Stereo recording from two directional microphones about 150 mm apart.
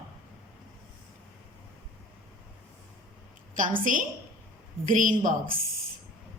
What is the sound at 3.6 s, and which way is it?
A woman's voice, 65° right (ahead or behind).